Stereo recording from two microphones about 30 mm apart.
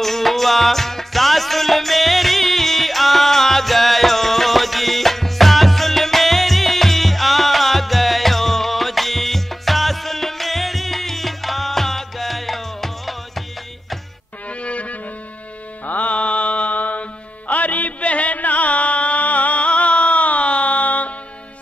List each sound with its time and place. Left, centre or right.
0.0 s music: centre
14.5 s music: left
18.0 s music: left
19.2 s music: left